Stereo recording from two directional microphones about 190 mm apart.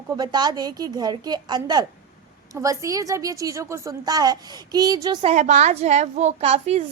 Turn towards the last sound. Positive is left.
turn(degrees=-35)  # may be behind; listen again after turning